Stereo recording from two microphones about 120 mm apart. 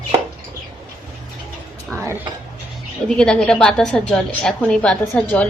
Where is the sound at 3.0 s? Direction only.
5° left (ahead or behind).